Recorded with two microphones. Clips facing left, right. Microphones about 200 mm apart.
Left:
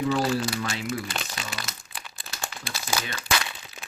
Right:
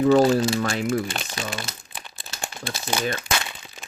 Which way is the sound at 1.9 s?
25° right (ahead or behind).